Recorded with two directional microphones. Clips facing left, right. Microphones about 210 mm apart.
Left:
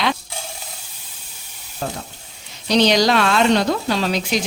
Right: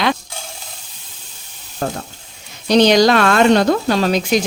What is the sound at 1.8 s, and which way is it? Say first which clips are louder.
Speech: right 4 dB; 55° right (ahead or behind).